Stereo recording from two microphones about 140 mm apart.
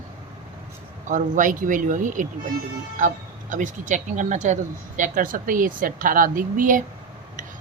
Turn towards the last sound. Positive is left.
turn(degrees=-70)  # may be behind; listen again after turning